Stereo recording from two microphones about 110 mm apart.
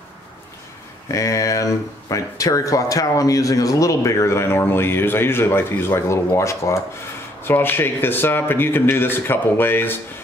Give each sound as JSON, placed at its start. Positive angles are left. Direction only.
{"t": 1.1, "sound": "speech", "side_deg": 30}